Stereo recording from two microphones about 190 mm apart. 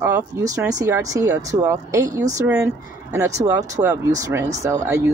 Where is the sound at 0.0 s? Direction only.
15° right (ahead or behind).